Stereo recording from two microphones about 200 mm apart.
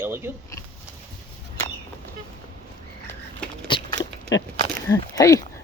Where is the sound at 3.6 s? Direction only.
20° left (ahead or behind).